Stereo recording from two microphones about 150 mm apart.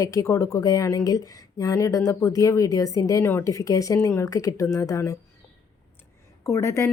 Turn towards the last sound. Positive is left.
turn(degrees=20)  # may be behind; listen again after turning